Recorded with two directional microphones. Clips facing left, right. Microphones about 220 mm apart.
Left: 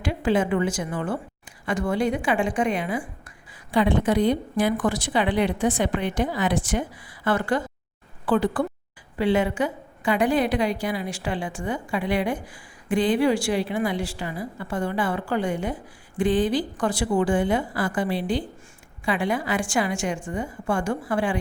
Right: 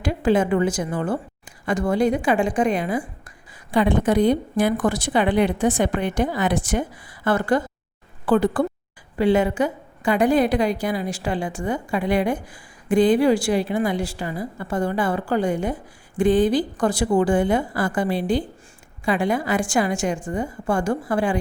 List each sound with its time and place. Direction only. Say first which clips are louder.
0.0 s a woman's voice: right 3 dB; 40° right (ahead or behind)